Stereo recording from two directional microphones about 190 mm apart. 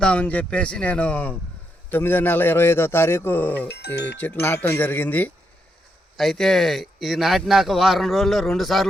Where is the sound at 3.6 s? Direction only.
60° left (ahead or behind).